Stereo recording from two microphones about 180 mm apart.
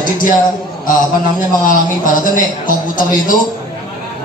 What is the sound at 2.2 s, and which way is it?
A man's voice, 50° left (ahead or behind).